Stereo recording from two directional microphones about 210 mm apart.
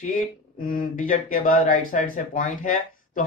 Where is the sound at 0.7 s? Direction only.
40° left (ahead or behind).